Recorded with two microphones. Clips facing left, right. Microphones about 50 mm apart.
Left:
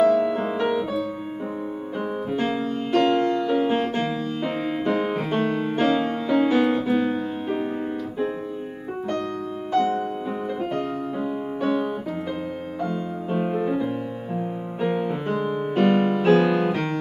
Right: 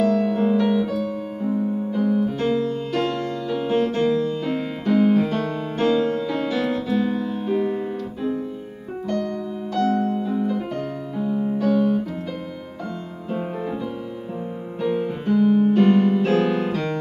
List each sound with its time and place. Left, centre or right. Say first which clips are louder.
0.0 s music: left 1 dB; left
9.0 s music: right 3 dB; left
10.4 s piano: right 1 dB; left
13.3 s music: left 3 dB; centre
14.8 s music: right 1 dB; left
15.2 s music: right 7 dB; left